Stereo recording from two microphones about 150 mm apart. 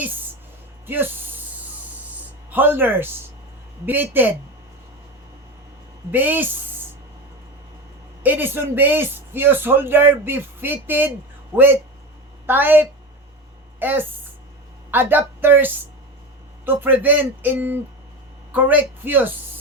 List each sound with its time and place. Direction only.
0.9 s a man's voice: 15° right (ahead or behind)
2.5 s a man's voice: 15° right (ahead or behind)
6.1 s a man's voice: 10° right (ahead or behind)
8.2 s a man's voice: 10° right (ahead or behind)